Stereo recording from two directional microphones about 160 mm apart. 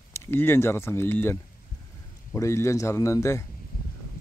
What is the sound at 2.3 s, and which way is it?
Speech, 20° left (ahead or behind).